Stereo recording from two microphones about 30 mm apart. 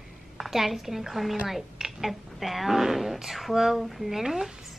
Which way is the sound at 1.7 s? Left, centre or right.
Centre.